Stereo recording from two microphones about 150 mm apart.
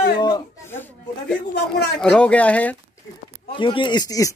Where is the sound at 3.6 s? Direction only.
35° left (ahead or behind).